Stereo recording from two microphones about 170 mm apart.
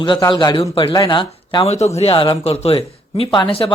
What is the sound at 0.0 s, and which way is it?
A man's voice, 25° left (ahead or behind).